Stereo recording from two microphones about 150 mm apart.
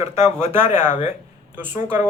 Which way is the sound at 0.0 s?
15° right (ahead or behind).